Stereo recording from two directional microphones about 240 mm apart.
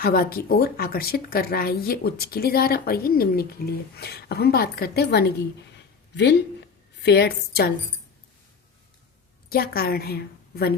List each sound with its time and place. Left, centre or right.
0.0 s speech: left
7.0 s speech: left
9.5 s a woman's voice: left